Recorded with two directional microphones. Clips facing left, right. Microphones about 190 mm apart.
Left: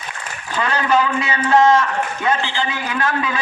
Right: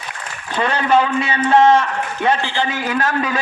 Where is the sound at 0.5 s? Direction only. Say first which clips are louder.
Right 2 dB; 25° right (ahead or behind).